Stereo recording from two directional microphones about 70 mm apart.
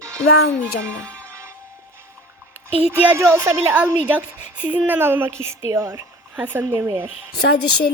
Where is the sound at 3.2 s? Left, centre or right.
Right.